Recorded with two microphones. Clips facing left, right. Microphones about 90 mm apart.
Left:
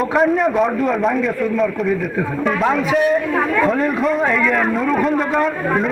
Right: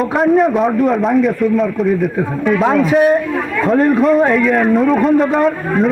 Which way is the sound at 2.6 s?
40° right (ahead or behind).